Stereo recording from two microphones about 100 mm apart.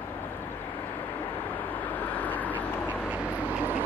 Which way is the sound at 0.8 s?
20° left (ahead or behind).